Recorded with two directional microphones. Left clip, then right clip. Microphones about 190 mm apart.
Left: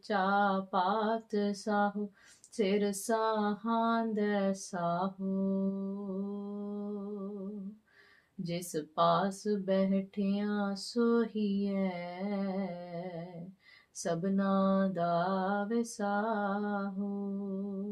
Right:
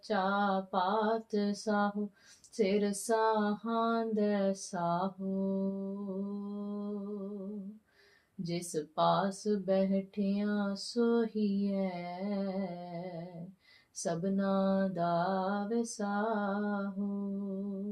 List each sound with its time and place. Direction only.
0.1 s female singing: 20° left (ahead or behind)
8.4 s female singing: 20° left (ahead or behind)
14.0 s female singing: 25° left (ahead or behind)